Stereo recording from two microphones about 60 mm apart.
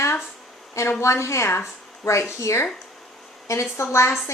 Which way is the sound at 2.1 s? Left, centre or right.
Left.